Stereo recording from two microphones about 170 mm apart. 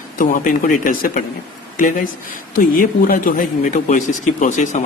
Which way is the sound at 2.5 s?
55° left (ahead or behind).